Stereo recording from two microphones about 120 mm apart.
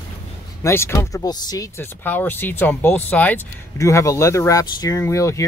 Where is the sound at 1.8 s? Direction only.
15° left (ahead or behind).